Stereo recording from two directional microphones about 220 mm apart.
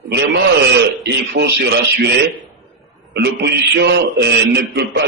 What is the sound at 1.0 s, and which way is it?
Speech, 45° right (ahead or behind).